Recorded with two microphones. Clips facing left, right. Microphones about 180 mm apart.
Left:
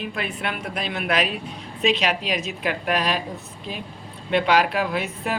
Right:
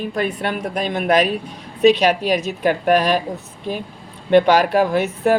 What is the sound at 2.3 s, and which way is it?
Speech, 45° right (ahead or behind).